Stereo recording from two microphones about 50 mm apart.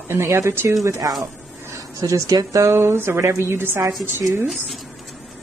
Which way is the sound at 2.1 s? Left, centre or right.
Right.